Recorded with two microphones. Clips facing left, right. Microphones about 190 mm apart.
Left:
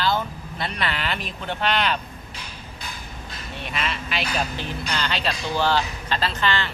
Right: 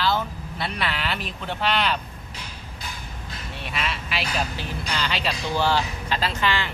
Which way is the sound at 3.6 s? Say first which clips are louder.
Left 1 dB; centre (ahead or behind).